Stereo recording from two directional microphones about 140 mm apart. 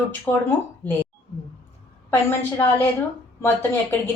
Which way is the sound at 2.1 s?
15° left (ahead or behind).